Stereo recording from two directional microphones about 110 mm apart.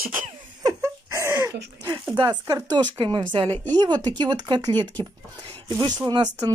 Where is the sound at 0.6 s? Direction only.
30° right (ahead or behind).